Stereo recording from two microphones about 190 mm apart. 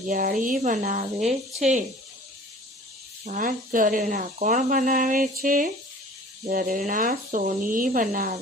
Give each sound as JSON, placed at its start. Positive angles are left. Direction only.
{"t": 0.1, "sound": "speech", "side_deg": -45}
{"t": 3.2, "sound": "speech", "side_deg": -45}